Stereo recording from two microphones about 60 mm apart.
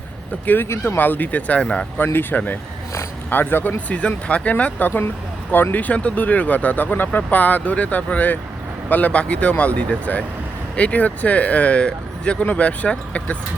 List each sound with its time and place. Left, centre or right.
0.4 s speech: left
1.6 s speech: centre
3.2 s speech: left